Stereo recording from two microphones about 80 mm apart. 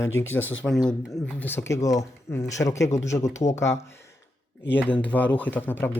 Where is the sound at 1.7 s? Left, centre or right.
Left.